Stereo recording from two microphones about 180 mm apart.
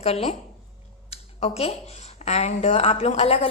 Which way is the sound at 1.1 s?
35° left (ahead or behind).